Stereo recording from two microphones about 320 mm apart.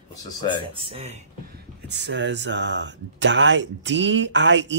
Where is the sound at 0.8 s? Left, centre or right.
Centre.